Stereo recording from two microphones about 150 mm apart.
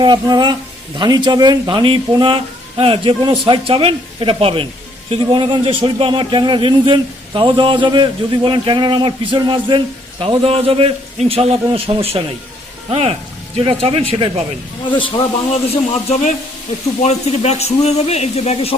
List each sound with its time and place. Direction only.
0.0 s speech: 30° right (ahead or behind)
15.7 s speech: 45° left (ahead or behind)